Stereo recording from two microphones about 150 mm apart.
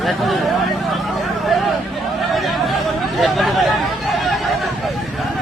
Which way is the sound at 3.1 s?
Centre (ahead or behind).